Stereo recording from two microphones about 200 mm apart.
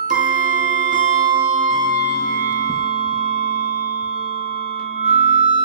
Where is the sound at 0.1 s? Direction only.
40° right (ahead or behind).